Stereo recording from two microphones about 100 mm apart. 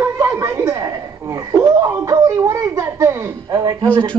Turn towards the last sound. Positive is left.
turn(degrees=-40)  # may be behind; listen again after turning